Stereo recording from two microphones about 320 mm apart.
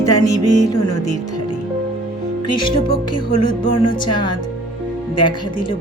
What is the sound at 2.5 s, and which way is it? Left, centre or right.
Speech, centre.